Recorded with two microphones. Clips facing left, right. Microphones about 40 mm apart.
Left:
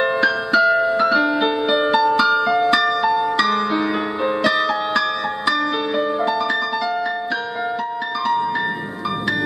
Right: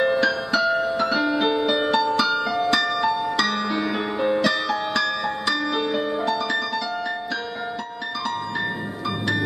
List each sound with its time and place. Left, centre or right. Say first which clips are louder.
0.2 s music: left 5 dB; centre
0.7 s piano: left 5 dB; centre
1.2 s music: left 2 dB; centre